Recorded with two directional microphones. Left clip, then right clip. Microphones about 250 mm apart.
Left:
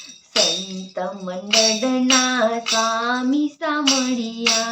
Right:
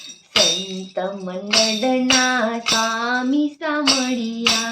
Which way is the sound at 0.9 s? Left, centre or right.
Centre.